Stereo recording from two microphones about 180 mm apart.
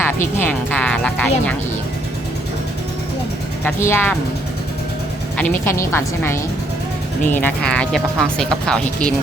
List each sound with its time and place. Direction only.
0.3 s speech: 10° left (ahead or behind)
3.6 s speech: 10° left (ahead or behind)
5.4 s speech: 15° left (ahead or behind)